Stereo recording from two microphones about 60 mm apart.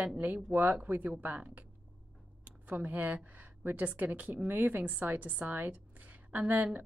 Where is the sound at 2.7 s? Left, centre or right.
Right.